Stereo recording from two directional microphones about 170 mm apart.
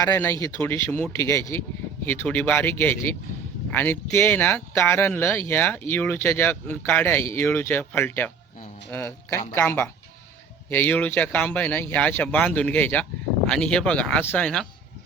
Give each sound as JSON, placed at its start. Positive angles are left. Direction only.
{"t": 0.0, "sound": "speech", "side_deg": 15}